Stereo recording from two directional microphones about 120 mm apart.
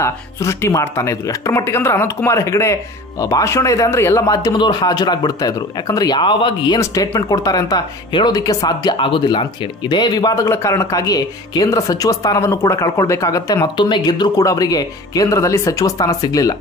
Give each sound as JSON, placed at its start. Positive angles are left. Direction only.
{"t": 0.0, "sound": "speech", "side_deg": 25}
{"t": 6.8, "sound": "speech", "side_deg": 25}